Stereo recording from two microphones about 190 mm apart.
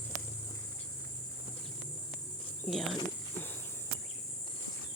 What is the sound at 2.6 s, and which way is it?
Cricket, centre (ahead or behind).